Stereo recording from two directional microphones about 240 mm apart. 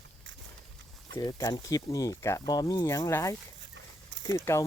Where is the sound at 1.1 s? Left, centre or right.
Centre.